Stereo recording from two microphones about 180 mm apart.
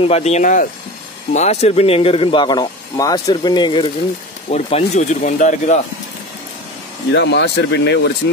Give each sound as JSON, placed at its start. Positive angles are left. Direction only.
{"t": 0.0, "sound": "speech", "side_deg": 35}
{"t": 4.5, "sound": "speech", "side_deg": 35}
{"t": 7.1, "sound": "speech", "side_deg": 75}